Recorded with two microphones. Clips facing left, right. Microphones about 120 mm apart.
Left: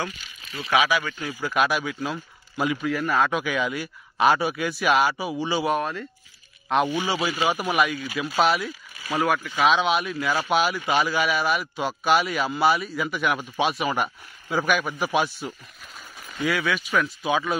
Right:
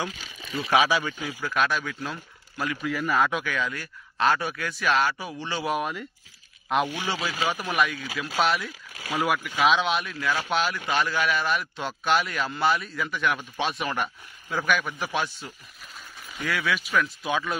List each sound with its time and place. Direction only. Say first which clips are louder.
1.2 s a man's voice: left 2 dB; 5° left (ahead or behind)
2.8 s a man's voice: right 1 dB; centre (ahead or behind)
3.4 s speech: left 4 dB; 15° left (ahead or behind)
5.7 s speech: left 3 dB; 10° right (ahead or behind)
6.9 s a man's voice: left 5 dB; 15° left (ahead or behind)
16.2 s a man's voice: left 5 dB; centre (ahead or behind)